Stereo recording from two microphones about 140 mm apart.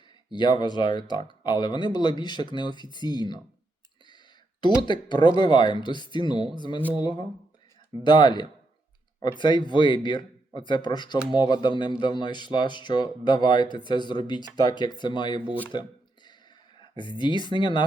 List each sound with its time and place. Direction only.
0.3 s speech: 30° left (ahead or behind)
4.8 s speech: 35° left (ahead or behind)
17.0 s speech: 35° left (ahead or behind)